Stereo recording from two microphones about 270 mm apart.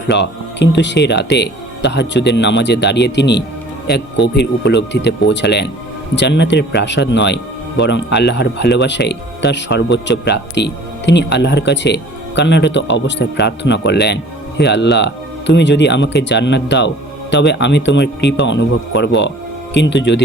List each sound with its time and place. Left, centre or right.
0.1 s speech: left